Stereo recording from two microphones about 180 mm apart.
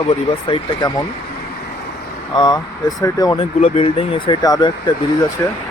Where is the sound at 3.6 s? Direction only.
35° left (ahead or behind).